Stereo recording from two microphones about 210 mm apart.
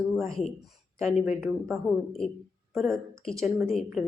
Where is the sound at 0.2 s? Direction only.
Centre (ahead or behind).